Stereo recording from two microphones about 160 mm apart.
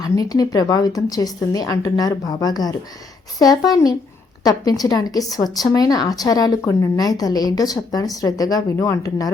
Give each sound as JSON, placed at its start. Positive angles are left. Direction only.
{"t": 0.0, "sound": "speech", "side_deg": 25}